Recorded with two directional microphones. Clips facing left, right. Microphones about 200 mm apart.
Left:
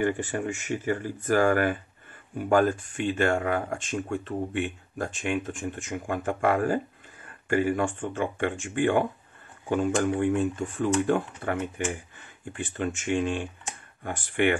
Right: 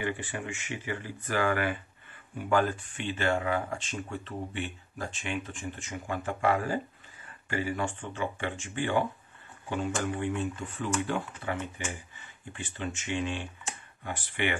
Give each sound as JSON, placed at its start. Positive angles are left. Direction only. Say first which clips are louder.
{"t": 0.0, "sound": "speech", "louder": "left 7 dB", "side_deg": 45}